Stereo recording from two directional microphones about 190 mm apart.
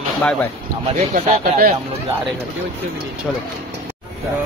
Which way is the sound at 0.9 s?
40° right (ahead or behind).